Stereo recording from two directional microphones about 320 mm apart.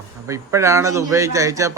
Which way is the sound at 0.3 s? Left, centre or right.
Centre.